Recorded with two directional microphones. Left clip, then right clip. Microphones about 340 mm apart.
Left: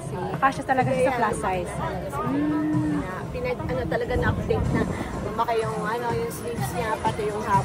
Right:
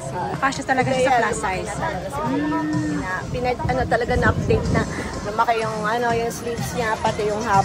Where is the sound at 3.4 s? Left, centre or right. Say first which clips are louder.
Right 6 dB; right.